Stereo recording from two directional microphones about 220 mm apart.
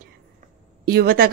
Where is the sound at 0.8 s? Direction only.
45° right (ahead or behind).